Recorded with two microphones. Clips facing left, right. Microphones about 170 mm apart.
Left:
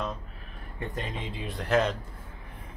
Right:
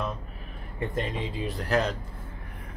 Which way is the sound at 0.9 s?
Centre (ahead or behind).